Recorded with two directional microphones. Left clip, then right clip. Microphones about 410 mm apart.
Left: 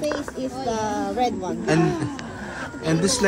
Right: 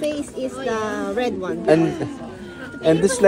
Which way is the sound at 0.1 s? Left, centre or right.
Right.